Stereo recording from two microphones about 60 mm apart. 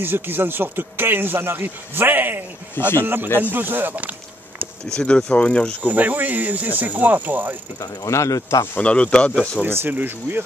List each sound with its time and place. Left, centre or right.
0.0 s a man's voice: right
2.7 s speech: left
3.0 s a man's voice: right
4.9 s speech: centre
5.9 s speech: right
7.8 s cricket: left
8.7 s speech: left
9.7 s a man's voice: right